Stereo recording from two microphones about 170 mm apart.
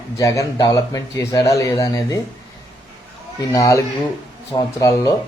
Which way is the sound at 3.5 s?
20° left (ahead or behind).